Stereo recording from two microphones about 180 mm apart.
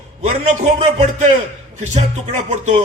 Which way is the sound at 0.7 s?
35° right (ahead or behind).